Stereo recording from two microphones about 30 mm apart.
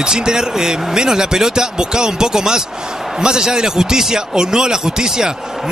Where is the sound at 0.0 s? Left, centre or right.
Right.